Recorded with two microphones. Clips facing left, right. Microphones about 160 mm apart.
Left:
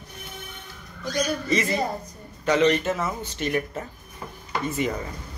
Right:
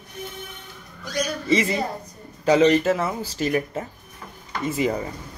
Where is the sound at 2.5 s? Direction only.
30° right (ahead or behind).